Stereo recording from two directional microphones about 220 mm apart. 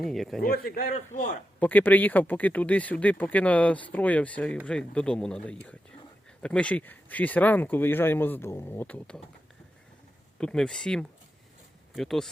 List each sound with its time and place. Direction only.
0.0 s speech: centre (ahead or behind)
0.4 s a man's voice: 40° left (ahead or behind)
1.5 s speech: 5° left (ahead or behind)
10.3 s speech: 5° left (ahead or behind)